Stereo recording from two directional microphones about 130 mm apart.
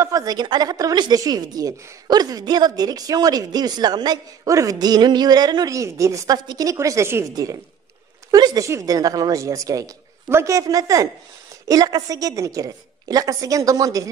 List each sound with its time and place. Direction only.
0.0 s a woman's voice: 25° right (ahead or behind)